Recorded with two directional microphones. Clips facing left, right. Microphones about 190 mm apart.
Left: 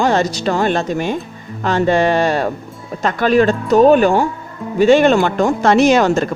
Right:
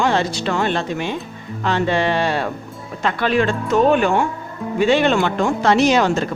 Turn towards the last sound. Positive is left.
turn(degrees=50)  # may be behind; listen again after turning